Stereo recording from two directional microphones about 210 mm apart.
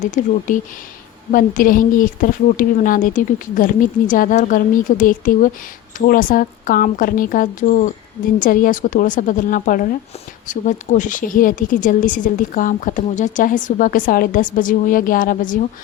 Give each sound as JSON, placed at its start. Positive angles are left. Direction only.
{"t": 0.1, "sound": "speech", "side_deg": 35}